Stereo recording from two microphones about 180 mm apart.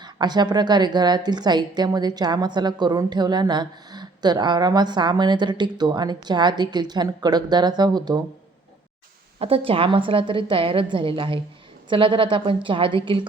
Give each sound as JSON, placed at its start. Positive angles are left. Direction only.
{"t": 0.0, "sound": "a woman's voice", "side_deg": -25}
{"t": 9.4, "sound": "a woman's voice", "side_deg": -30}